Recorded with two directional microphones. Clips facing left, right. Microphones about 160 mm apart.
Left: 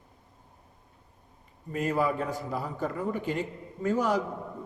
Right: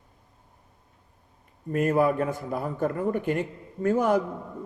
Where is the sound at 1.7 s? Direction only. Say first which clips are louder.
Right 5 dB; 55° right (ahead or behind).